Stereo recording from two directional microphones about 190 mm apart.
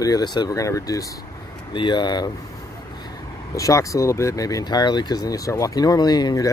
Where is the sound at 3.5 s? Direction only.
15° left (ahead or behind).